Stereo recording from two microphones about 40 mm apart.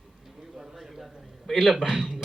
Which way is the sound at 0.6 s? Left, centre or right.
Centre.